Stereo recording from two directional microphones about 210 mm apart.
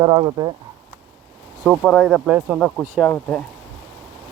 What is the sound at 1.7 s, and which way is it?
Speech, centre (ahead or behind).